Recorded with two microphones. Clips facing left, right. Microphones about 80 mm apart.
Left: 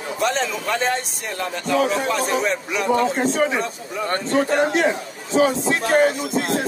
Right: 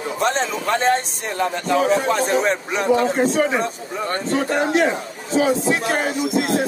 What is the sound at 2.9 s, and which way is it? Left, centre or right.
Speech, centre.